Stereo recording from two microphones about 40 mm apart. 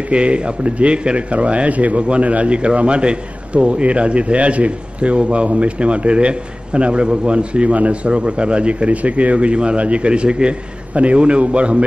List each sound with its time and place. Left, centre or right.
0.1 s a man's voice: right